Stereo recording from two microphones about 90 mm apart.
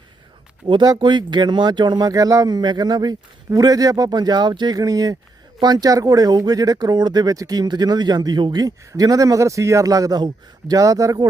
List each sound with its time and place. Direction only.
0.9 s speech: 60° right (ahead or behind)
8.9 s a man's voice: 40° right (ahead or behind)